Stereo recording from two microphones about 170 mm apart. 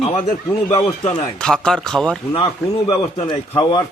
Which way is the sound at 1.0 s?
5° left (ahead or behind).